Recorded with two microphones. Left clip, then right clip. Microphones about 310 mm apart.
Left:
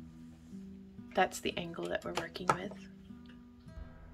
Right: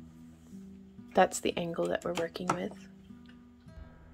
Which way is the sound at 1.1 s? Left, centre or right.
Right.